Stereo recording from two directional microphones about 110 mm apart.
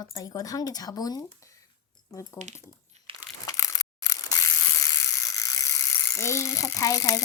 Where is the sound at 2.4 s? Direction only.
90° right.